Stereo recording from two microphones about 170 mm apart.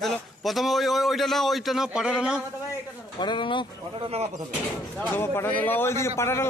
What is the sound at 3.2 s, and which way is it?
Speech, 30° left (ahead or behind).